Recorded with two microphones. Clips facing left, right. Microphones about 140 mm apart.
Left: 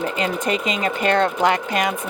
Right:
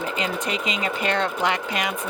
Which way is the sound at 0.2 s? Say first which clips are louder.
Left 5 dB; 45° left (ahead or behind).